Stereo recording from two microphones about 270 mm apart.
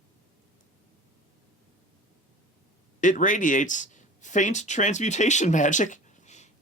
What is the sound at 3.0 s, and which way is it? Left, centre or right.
Speech, left.